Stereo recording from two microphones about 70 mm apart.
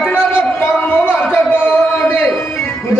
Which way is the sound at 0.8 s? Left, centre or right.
Centre.